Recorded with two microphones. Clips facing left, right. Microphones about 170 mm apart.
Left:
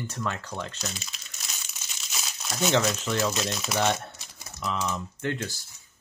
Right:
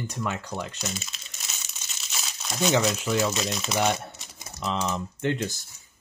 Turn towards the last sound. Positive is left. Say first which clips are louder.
# right 3 dB
turn(degrees=-20)  # may be behind; listen again after turning